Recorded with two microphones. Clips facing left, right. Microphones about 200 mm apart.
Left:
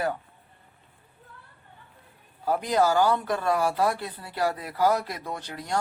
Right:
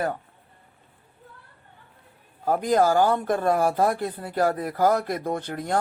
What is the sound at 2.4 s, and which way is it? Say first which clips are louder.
Speech: right 3 dB; 45° right (ahead or behind).